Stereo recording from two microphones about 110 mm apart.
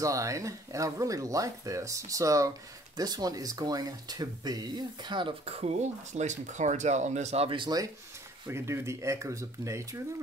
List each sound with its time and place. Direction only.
0.0 s speech: 30° right (ahead or behind)
5.4 s speech: 70° right (ahead or behind); by 7.4 s 90° right
7.4 s speech: 50° right (ahead or behind)
8.5 s speech: 20° right (ahead or behind)